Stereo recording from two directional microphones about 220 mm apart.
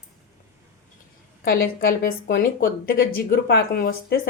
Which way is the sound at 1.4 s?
45° left (ahead or behind).